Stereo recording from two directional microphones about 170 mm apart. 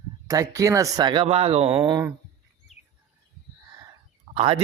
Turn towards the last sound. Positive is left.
turn(degrees=-35)  # may be behind; listen again after turning